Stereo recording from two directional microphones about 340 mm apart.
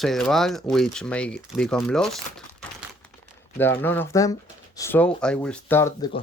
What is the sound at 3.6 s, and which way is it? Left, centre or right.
Speech, centre.